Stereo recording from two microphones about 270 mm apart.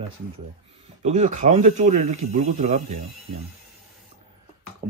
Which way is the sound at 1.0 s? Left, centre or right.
Right.